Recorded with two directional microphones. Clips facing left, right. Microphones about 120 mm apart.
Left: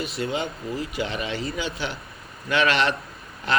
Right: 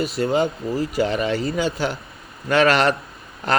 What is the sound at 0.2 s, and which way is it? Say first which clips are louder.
Speech: right 8 dB; 45° right (ahead or behind).